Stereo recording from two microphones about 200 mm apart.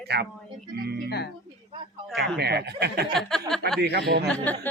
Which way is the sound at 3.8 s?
55° right (ahead or behind).